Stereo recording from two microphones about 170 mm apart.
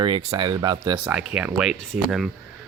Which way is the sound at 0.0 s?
30° right (ahead or behind).